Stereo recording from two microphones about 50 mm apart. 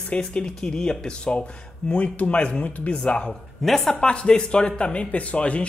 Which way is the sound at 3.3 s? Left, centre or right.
Centre.